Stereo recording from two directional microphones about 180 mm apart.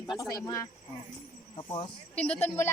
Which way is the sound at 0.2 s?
20° left (ahead or behind).